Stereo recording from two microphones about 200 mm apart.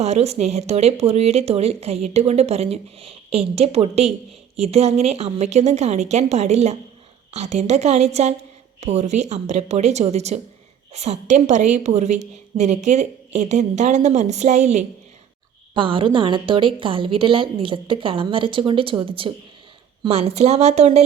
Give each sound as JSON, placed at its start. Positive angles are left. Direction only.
{"t": 0.0, "sound": "a woman's voice", "side_deg": -30}